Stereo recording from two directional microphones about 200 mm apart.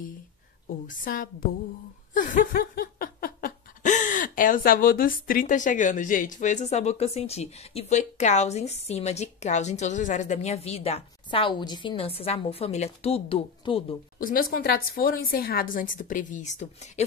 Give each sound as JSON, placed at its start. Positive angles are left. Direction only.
{"t": 0.8, "sound": "a woman's voice", "side_deg": 45}
{"t": 2.1, "sound": "laughter", "side_deg": 40}
{"t": 14.1, "sound": "a woman's voice", "side_deg": 45}